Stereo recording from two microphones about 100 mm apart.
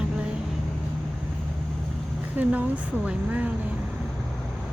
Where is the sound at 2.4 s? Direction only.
15° right (ahead or behind).